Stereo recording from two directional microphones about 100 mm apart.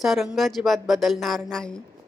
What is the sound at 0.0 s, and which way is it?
A woman's voice, centre (ahead or behind).